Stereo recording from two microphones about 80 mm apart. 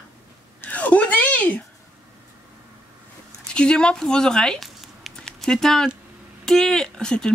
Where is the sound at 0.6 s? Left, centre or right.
Left.